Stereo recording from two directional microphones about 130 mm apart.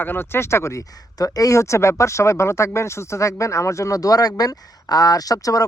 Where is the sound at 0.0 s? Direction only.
15° left (ahead or behind).